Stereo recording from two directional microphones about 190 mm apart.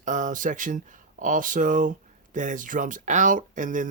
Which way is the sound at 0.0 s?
40° right (ahead or behind).